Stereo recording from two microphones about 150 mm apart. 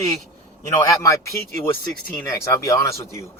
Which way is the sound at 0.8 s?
20° left (ahead or behind).